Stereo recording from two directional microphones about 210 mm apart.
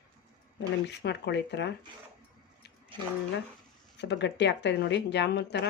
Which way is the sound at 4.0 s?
55° left (ahead or behind).